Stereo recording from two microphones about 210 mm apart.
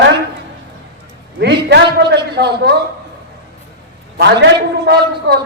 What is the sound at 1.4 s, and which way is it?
A man's voice, 55° right (ahead or behind).